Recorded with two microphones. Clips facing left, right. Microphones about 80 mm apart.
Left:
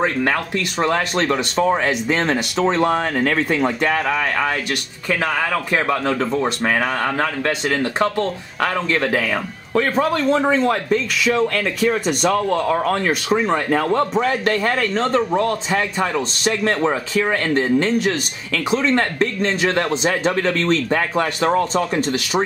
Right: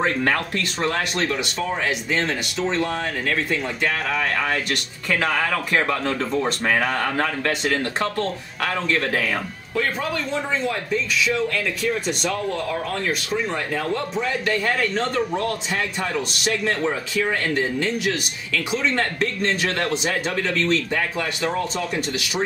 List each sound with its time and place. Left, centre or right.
0.0 s speech: centre
0.8 s speech: left
5.5 s speech: centre
9.8 s speech: left
14.1 s speech: left
15.0 s speech: left
19.9 s speech: left
20.2 s speech: left